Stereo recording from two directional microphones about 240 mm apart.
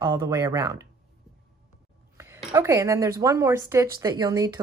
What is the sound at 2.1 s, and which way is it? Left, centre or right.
A woman's voice, centre.